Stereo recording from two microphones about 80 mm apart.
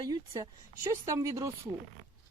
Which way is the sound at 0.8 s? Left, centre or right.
Right.